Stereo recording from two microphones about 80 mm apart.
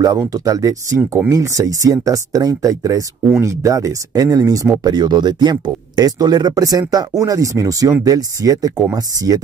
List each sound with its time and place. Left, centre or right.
0.5 s speech: right
4.8 s speech: right